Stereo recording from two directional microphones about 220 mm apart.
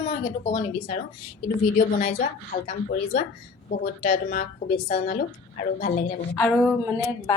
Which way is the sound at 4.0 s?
40° left (ahead or behind).